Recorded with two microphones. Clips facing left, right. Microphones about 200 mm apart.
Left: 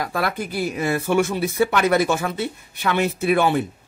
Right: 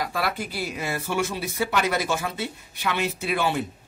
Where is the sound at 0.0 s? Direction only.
50° left (ahead or behind).